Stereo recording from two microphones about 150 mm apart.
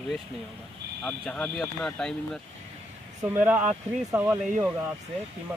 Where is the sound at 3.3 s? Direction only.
10° right (ahead or behind).